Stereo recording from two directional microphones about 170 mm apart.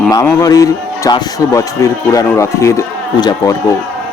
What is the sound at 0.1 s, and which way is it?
A man's voice, 20° left (ahead or behind).